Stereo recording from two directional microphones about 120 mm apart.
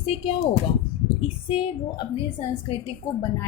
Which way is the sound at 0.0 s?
55° left (ahead or behind).